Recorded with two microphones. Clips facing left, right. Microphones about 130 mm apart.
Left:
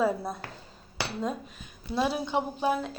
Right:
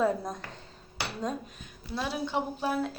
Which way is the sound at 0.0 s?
5° left (ahead or behind).